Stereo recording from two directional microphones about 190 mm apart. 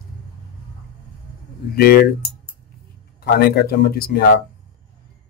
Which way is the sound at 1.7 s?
55° left (ahead or behind).